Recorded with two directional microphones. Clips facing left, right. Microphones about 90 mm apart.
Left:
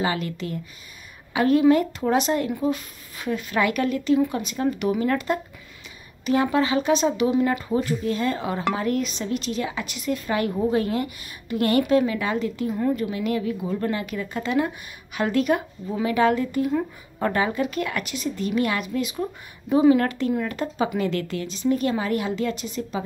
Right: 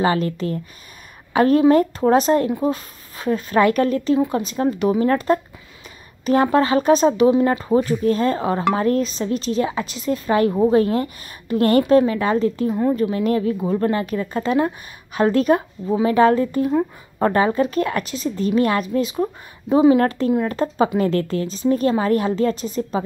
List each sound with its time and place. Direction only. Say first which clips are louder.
0.0 s a woman's voice: right 6 dB; 40° right (ahead or behind)